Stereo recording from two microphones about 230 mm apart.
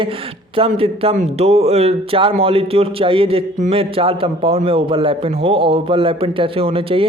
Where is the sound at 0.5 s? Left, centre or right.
Right.